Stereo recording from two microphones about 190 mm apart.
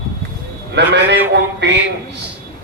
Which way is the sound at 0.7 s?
65° right (ahead or behind).